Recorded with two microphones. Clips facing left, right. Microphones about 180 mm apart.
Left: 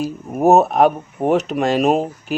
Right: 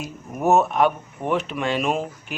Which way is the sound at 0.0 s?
35° left (ahead or behind).